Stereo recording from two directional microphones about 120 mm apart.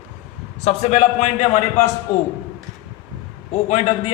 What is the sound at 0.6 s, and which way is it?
A man's voice, 70° left (ahead or behind).